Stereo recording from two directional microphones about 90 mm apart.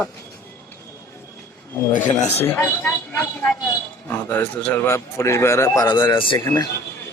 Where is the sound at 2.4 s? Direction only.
25° left (ahead or behind); by 5.9 s 45° left (ahead or behind).